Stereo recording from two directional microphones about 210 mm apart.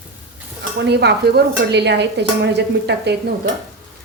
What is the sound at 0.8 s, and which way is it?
A woman's voice, 55° right (ahead or behind).